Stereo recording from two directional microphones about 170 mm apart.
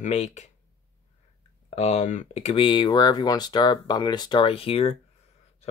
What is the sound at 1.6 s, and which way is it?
Speech, 35° left (ahead or behind).